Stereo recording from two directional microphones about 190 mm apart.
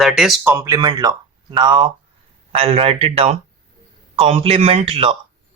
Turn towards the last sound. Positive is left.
turn(degrees=-30)  # may be behind; listen again after turning